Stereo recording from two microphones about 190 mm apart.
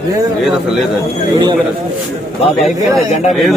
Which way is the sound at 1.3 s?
20° right (ahead or behind).